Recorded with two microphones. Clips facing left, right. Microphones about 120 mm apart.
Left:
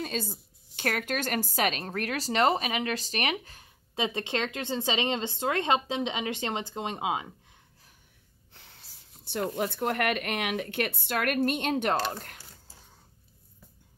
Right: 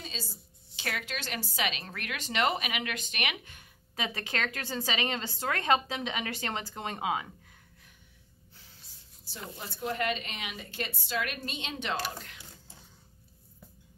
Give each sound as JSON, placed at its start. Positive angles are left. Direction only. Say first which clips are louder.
{"t": 0.0, "sound": "a woman's voice", "louder": "left 10 dB", "side_deg": 55}
{"t": 8.5, "sound": "speech", "louder": "left 4 dB", "side_deg": 65}